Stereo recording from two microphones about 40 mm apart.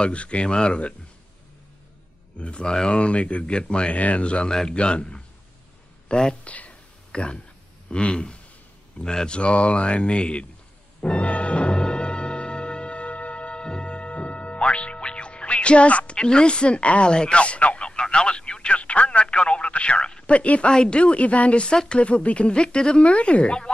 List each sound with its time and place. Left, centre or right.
0.0 s speech: left
2.3 s speech: left
6.4 s speech: left
6.7 s a sound: left
7.9 s speech: left
11.0 s music: left
16.2 s speech: left
20.3 s a woman's voice: left